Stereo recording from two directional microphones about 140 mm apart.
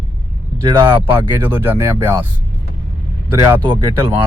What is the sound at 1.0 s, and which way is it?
Speech, 15° right (ahead or behind).